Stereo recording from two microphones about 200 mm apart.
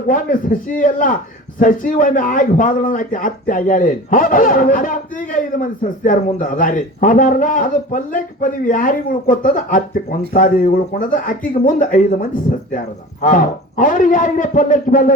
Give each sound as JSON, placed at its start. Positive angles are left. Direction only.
{"t": 0.1, "sound": "a man's voice", "side_deg": 45}